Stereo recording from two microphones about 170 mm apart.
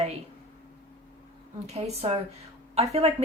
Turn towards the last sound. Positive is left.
turn(degrees=-35)  # may be behind; listen again after turning